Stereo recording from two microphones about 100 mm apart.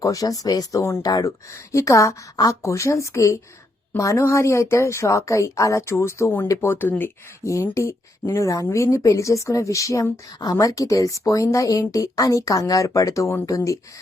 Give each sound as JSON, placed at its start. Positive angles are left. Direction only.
{"t": 0.0, "sound": "speech", "side_deg": 35}
{"t": 1.0, "sound": "a woman's voice", "side_deg": 40}
{"t": 7.4, "sound": "speech", "side_deg": 30}